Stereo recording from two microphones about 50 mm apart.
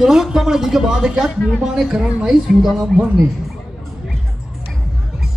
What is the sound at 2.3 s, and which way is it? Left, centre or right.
Speech, centre.